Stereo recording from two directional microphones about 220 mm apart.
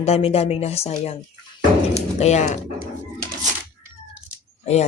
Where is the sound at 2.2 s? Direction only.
30° left (ahead or behind).